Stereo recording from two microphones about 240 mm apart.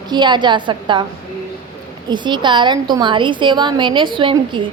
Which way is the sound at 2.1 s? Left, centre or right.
Centre.